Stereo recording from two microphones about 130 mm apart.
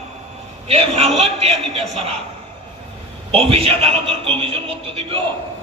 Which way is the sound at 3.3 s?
50° right (ahead or behind).